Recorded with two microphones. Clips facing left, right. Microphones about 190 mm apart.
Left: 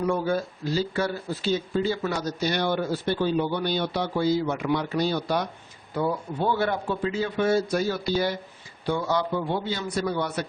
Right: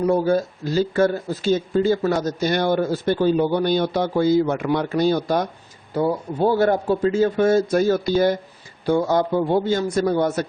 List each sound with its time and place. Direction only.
0.0 s speech: 40° right (ahead or behind)